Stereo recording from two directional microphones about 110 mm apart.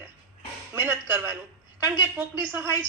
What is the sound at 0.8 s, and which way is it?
A man's voice, 20° right (ahead or behind).